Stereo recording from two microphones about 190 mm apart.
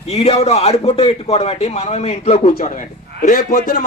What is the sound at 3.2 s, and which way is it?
Speech, 50° left (ahead or behind).